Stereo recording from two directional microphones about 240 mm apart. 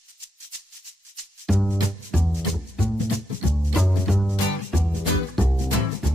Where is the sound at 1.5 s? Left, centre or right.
Centre.